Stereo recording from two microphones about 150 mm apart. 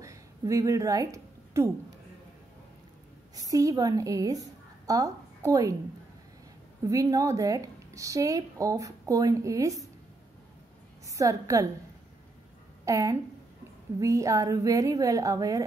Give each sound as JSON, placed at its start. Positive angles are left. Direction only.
{"t": 0.0, "sound": "a sound", "side_deg": -20}
{"t": 3.3, "sound": "a woman's voice", "side_deg": -25}
{"t": 6.8, "sound": "a woman's voice", "side_deg": -20}
{"t": 11.1, "sound": "a woman's voice", "side_deg": -20}
{"t": 12.8, "sound": "a woman's voice", "side_deg": -20}